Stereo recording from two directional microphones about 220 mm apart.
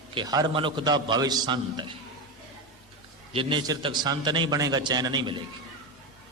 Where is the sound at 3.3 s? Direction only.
20° right (ahead or behind).